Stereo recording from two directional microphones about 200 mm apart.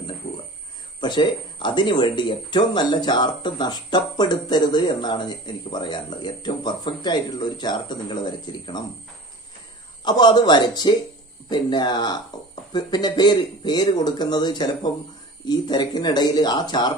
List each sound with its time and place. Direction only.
1.0 s speech: 25° left (ahead or behind)
10.0 s speech: 20° left (ahead or behind)